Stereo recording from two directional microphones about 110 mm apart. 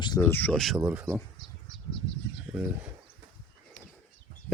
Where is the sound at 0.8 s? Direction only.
10° right (ahead or behind).